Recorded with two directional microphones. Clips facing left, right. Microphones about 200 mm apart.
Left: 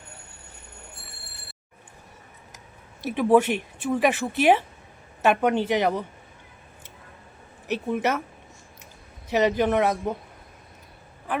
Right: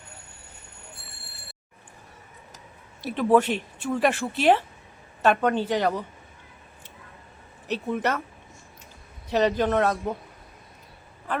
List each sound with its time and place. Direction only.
3.0 s speech: 15° left (ahead or behind)
7.7 s speech: 10° left (ahead or behind)
9.3 s speech: 10° left (ahead or behind)